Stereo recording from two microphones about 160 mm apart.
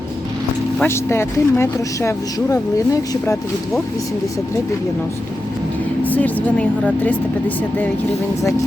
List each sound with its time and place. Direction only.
0.8 s speech: 15° left (ahead or behind)
6.1 s speech: 10° left (ahead or behind)